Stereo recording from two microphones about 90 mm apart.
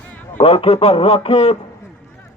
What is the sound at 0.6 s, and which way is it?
Speech, 90° left.